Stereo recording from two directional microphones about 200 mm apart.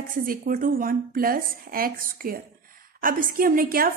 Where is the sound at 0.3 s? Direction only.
45° right (ahead or behind).